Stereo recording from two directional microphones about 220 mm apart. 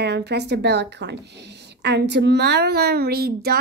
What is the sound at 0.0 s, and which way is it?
A woman's voice, 50° right (ahead or behind).